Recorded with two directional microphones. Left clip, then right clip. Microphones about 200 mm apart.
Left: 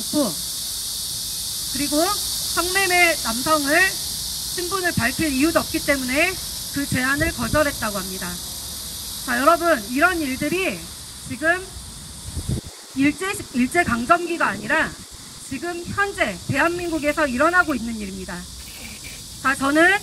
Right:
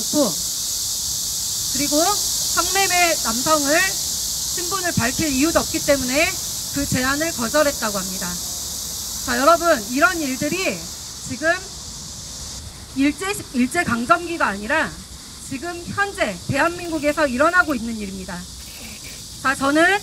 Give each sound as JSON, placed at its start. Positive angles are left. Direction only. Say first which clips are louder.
{"t": 1.8, "sound": "speech", "louder": "right 2 dB", "side_deg": -35}
{"t": 13.0, "sound": "speech", "louder": "even", "side_deg": -40}
{"t": 19.4, "sound": "speech", "louder": "even", "side_deg": -35}